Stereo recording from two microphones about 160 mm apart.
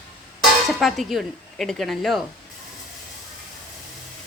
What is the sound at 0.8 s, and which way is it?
A woman's voice, centre (ahead or behind).